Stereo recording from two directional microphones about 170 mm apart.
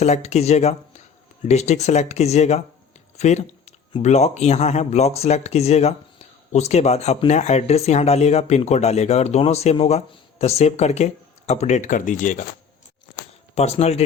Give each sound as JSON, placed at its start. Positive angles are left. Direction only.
{"t": 0.0, "sound": "speech", "side_deg": 40}
{"t": 13.6, "sound": "speech", "side_deg": 40}